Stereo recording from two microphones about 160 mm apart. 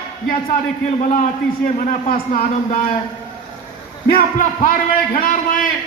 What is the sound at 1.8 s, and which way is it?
A man's voice, 55° left (ahead or behind).